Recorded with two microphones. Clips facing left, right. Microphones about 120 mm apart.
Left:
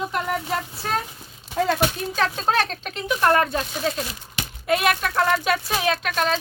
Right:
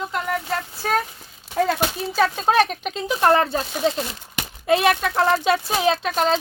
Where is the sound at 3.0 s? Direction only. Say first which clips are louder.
Right 2 dB; 25° right (ahead or behind).